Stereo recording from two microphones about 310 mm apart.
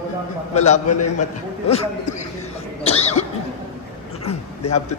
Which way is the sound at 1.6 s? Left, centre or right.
Centre.